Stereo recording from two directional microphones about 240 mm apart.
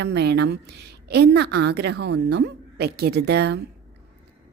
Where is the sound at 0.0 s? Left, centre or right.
Right.